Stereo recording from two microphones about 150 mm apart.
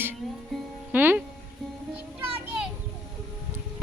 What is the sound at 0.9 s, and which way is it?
Music, 10° right (ahead or behind).